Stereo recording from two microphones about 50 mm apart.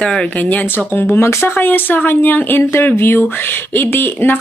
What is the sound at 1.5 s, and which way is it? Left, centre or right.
A woman's voice, left.